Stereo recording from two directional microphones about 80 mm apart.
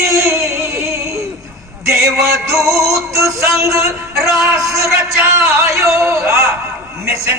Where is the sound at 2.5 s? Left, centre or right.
Right.